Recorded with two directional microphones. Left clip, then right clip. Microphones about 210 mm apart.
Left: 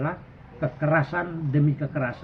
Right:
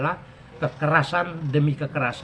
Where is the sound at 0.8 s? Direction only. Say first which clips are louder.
Right 3 dB; 30° right (ahead or behind).